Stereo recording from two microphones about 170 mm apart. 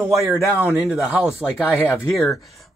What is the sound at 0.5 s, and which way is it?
Speech, 10° right (ahead or behind).